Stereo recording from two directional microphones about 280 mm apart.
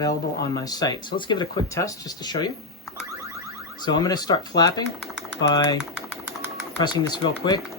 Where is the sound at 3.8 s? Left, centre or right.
Centre.